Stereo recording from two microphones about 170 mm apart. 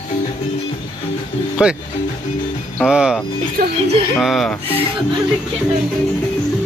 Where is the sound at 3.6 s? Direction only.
60° right (ahead or behind).